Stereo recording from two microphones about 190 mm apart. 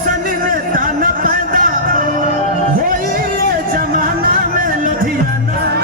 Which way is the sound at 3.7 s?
45° right (ahead or behind).